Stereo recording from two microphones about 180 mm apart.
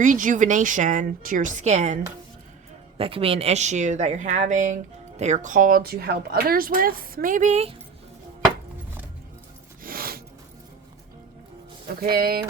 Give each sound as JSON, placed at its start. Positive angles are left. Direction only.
{"t": 0.0, "sound": "speech", "side_deg": -45}
{"t": 3.0, "sound": "speech", "side_deg": -30}
{"t": 9.8, "sound": "a sound", "side_deg": -55}
{"t": 12.1, "sound": "speech", "side_deg": -55}